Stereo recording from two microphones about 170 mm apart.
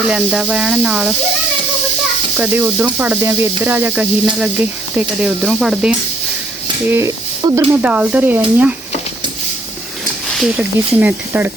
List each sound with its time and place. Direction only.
0.1 s speech: 5° right (ahead or behind)
2.4 s speech: 10° right (ahead or behind)
6.9 s speech: 15° right (ahead or behind)
10.3 s speech: 5° right (ahead or behind)